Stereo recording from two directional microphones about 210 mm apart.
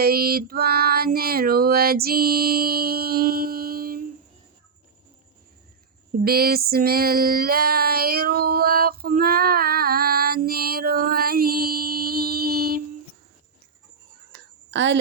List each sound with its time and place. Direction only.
0.0 s female singing: 45° right (ahead or behind)
6.1 s female singing: 45° right (ahead or behind)
14.7 s speech: 60° right (ahead or behind)